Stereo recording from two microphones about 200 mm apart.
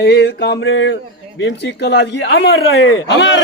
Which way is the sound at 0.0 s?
55° left (ahead or behind).